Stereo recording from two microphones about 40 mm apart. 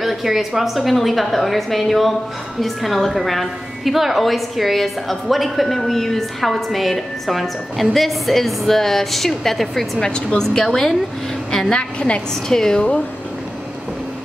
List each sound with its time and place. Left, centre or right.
0.0 s a woman's voice: centre
11.7 s a woman's voice: left
12.4 s a woman's voice: centre